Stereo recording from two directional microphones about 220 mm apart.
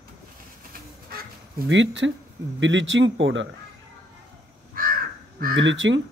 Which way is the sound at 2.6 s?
55° right (ahead or behind).